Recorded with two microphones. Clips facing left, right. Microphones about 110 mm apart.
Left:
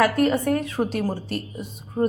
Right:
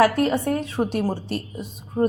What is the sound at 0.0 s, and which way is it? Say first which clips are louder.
Speech: right 1 dB; 25° right (ahead or behind).